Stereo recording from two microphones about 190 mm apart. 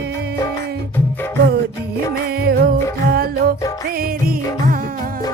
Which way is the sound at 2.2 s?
55° right (ahead or behind).